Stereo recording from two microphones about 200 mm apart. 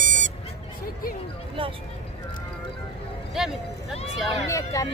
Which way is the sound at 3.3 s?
Centre (ahead or behind).